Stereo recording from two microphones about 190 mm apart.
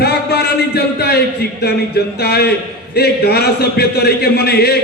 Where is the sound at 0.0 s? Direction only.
60° left (ahead or behind).